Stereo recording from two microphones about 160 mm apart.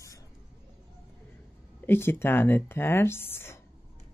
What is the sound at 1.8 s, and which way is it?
Speech, 15° left (ahead or behind).